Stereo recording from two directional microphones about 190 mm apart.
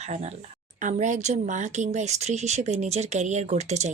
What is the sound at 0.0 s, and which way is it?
Speech, 35° right (ahead or behind).